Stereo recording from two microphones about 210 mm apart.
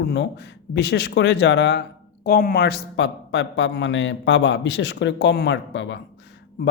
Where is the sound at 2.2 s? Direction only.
45° left (ahead or behind).